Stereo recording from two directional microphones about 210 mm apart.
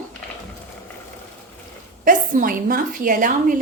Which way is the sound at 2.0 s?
40° right (ahead or behind).